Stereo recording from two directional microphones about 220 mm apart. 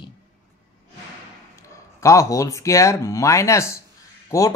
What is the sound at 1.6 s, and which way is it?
Speech, 15° left (ahead or behind).